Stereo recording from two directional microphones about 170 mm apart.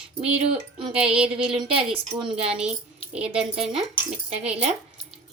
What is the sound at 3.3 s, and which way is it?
Speech, 35° right (ahead or behind).